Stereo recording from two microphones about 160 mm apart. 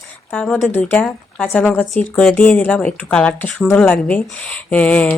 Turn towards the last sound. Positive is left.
turn(degrees=10)  # may be behind; listen again after turning